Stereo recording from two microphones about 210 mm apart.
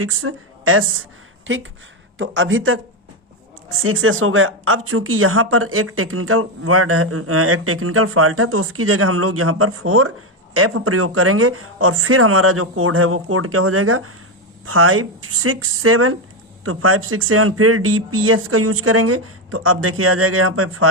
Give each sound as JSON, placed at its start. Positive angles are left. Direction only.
{"t": 0.0, "sound": "speech", "side_deg": -90}
{"t": 2.1, "sound": "speech", "side_deg": -60}